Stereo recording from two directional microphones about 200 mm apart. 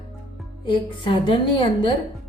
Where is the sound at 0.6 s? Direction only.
25° left (ahead or behind).